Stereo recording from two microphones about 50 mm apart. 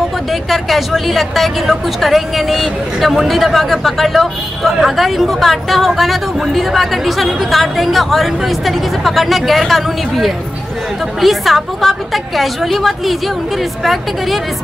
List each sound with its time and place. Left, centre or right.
0.3 s speech: centre